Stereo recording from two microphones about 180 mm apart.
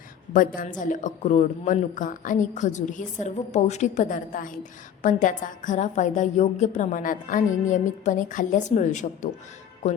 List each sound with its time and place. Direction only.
0.3 s a woman's voice: 50° left (ahead or behind)